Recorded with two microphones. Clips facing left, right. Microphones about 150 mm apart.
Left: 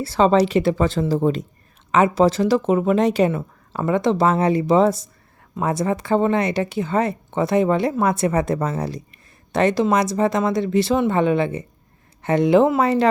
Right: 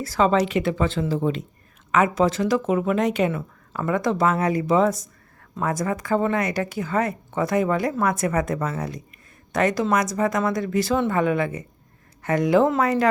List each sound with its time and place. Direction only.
0.0 s speech: 30° left (ahead or behind)